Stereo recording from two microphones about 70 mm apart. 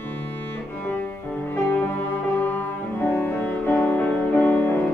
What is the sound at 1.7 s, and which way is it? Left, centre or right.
Music, left.